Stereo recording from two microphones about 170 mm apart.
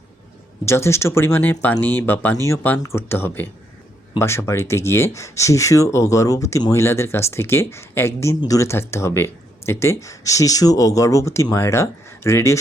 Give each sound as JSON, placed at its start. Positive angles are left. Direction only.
{"t": 0.6, "sound": "speech", "side_deg": 15}